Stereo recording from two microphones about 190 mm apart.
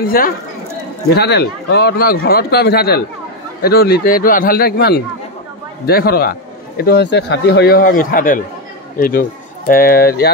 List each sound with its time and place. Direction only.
0.0 s a man's voice: 50° left (ahead or behind)
9.7 s a man's voice: 50° left (ahead or behind)